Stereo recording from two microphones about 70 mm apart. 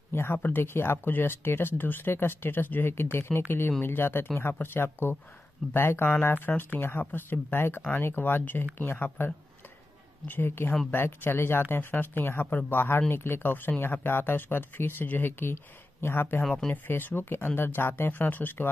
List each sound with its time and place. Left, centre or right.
0.1 s speech: left
16.4 s speech: centre
16.7 s speech: left